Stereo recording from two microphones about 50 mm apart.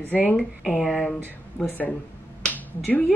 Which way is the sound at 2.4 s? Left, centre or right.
Left.